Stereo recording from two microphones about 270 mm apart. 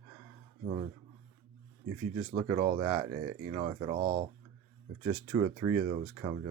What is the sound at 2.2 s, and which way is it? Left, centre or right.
Speech, centre.